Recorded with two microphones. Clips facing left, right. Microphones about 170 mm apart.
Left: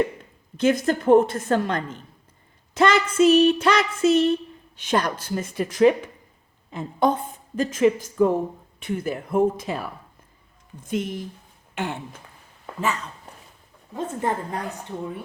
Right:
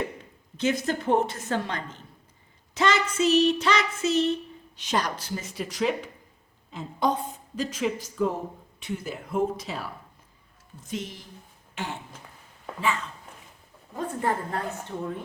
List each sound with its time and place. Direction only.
0.5 s a woman's voice: 55° left (ahead or behind)
10.8 s speech: 55° left (ahead or behind)
13.9 s a woman's voice: 20° left (ahead or behind)